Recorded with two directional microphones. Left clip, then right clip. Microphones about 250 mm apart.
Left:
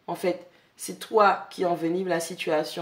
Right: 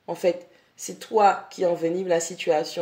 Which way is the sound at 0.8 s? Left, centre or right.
Centre.